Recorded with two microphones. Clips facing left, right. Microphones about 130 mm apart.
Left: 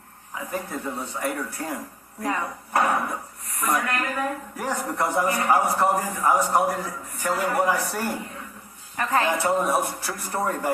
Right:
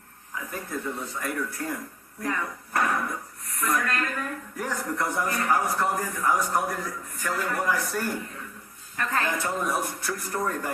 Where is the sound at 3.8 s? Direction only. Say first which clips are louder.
Left 3 dB; 20° left (ahead or behind).